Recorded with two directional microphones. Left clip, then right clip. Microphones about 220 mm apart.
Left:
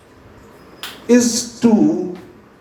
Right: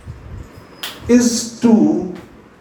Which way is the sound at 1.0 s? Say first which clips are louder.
Even; 30° left (ahead or behind).